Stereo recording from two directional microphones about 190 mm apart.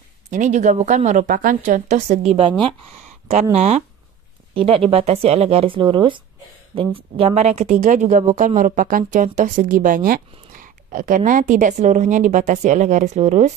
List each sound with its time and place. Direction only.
0.3 s speech: 40° right (ahead or behind)